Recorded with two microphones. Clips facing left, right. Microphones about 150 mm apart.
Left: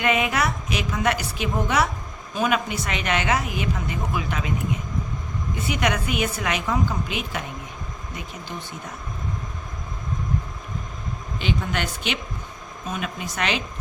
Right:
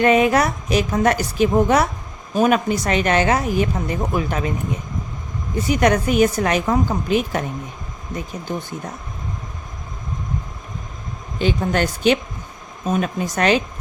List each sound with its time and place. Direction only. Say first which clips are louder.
0.0 s a woman's voice: right 7 dB; 40° right (ahead or behind)
5.5 s a woman's voice: right 8 dB; 40° right (ahead or behind)
11.3 s a woman's voice: right 7 dB; 40° right (ahead or behind)